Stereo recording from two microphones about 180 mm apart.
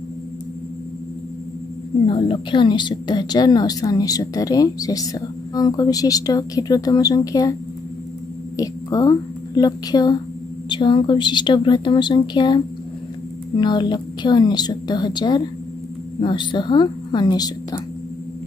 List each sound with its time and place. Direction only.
2.0 s a woman's voice: 30° left (ahead or behind)
8.5 s a woman's voice: 20° left (ahead or behind)